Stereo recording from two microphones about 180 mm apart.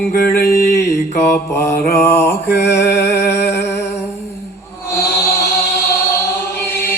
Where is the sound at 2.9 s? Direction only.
15° left (ahead or behind).